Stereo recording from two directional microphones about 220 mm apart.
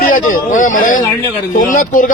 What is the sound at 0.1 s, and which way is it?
A man's voice, 35° left (ahead or behind).